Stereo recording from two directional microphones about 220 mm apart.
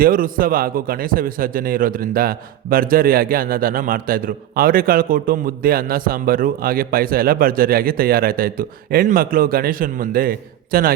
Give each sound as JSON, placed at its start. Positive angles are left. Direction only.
{"t": 0.0, "sound": "a man's voice", "side_deg": -40}